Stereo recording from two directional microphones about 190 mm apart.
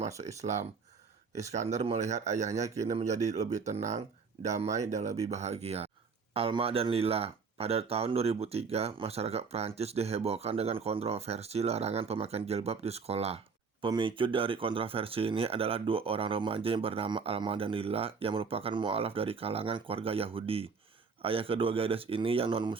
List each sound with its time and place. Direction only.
0.2 s speech: 35° right (ahead or behind)